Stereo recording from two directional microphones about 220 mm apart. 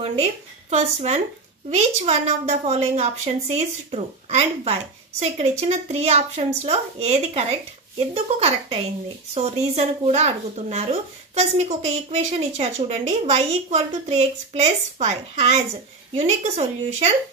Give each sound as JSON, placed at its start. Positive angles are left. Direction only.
{"t": 0.0, "sound": "speech", "side_deg": -30}